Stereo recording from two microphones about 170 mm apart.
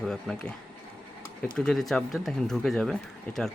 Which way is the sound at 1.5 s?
5° left (ahead or behind).